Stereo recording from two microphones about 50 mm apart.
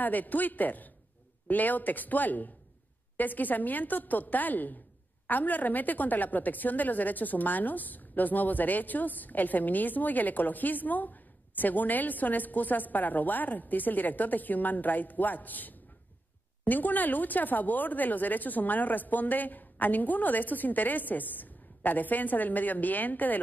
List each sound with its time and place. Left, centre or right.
0.0 s a woman's voice: left